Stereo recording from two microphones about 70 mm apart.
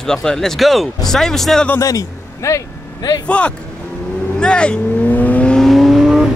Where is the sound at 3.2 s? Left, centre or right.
Centre.